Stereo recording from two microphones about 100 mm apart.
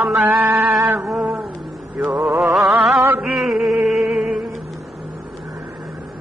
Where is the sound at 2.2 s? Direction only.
20° right (ahead or behind).